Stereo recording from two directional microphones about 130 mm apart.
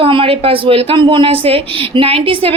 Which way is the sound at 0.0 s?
45° right (ahead or behind).